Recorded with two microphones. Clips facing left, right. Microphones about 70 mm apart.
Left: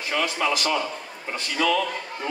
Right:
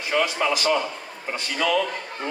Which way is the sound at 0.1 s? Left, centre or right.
Right.